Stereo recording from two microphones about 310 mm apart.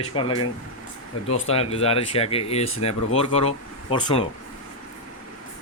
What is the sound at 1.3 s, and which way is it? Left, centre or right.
Speech, centre.